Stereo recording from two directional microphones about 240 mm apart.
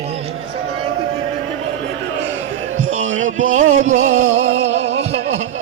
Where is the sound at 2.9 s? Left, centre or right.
Right.